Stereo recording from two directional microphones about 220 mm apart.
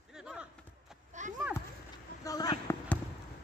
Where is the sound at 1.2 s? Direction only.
35° right (ahead or behind).